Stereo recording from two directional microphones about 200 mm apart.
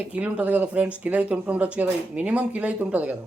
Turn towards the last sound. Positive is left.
turn(degrees=-5)  # may be behind; listen again after turning